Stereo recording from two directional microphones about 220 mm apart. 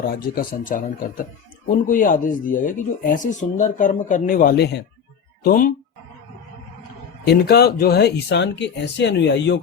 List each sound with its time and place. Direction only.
0.0 s speech: 40° left (ahead or behind)
7.3 s speech: 45° left (ahead or behind)